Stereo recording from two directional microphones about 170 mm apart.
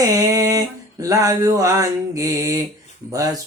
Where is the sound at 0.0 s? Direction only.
20° right (ahead or behind).